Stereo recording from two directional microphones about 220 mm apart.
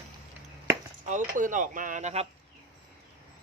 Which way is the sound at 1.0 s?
35° right (ahead or behind).